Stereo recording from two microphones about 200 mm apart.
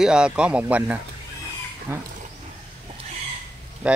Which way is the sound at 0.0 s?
5° right (ahead or behind).